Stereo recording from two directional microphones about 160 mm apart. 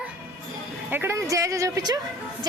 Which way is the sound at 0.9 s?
15° right (ahead or behind).